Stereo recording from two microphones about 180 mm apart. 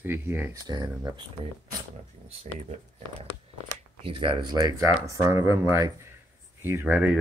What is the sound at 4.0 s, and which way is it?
Speech, 30° right (ahead or behind).